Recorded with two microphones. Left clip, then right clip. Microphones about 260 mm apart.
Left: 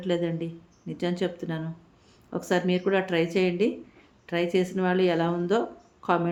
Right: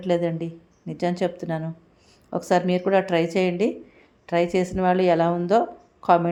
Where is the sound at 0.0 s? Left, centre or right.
Centre.